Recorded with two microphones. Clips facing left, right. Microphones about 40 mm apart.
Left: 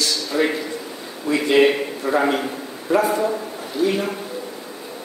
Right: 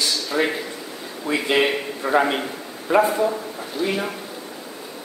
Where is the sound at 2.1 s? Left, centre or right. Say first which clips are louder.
Even; centre.